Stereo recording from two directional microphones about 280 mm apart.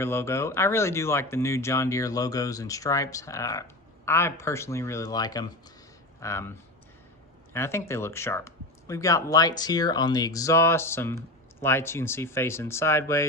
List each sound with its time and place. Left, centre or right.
0.0 s speech: centre
7.5 s speech: centre